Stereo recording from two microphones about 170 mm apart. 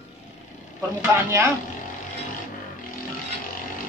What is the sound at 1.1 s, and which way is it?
Speech, 15° right (ahead or behind).